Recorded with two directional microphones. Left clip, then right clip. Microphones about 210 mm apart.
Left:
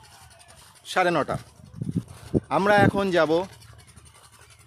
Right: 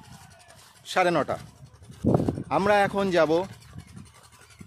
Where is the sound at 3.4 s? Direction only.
35° left (ahead or behind).